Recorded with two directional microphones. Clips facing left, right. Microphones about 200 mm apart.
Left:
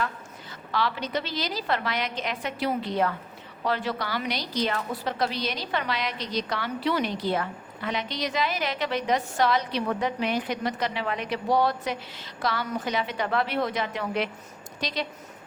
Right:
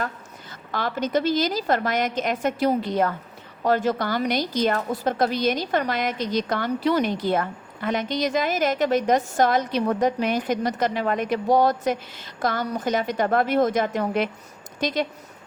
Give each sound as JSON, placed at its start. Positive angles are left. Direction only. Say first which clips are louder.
{"t": 0.7, "sound": "a woman's voice", "louder": "right 4 dB", "side_deg": -45}